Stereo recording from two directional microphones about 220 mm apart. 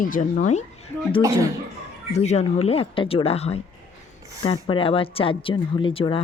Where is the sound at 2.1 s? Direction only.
30° left (ahead or behind).